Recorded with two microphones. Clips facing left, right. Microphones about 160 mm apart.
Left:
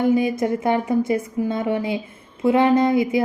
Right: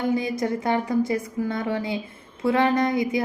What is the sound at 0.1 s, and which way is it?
Speech, 25° left (ahead or behind).